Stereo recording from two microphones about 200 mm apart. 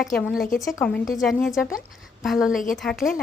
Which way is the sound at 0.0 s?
Centre (ahead or behind).